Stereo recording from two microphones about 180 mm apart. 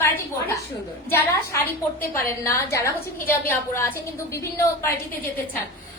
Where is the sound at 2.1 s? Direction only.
15° left (ahead or behind).